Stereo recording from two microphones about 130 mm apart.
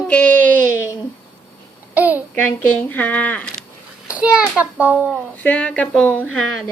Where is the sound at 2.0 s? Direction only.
10° right (ahead or behind).